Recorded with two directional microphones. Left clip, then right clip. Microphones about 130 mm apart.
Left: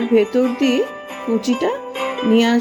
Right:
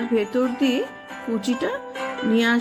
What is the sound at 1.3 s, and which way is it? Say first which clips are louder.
Music: left 6 dB; 30° left (ahead or behind).